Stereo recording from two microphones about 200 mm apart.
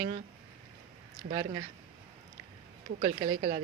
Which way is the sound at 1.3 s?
35° right (ahead or behind).